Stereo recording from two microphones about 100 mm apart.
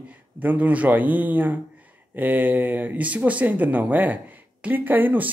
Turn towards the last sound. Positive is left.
turn(degrees=-20)  # may be behind; listen again after turning